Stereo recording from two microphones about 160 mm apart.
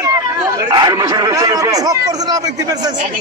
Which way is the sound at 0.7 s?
25° right (ahead or behind).